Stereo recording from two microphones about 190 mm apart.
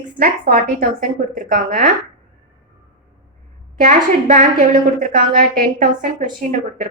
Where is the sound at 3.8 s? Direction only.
45° right (ahead or behind).